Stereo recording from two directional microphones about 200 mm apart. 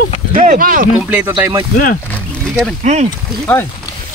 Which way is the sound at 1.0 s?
5° right (ahead or behind).